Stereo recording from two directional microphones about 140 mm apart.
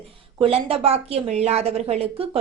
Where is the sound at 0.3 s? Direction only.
40° right (ahead or behind).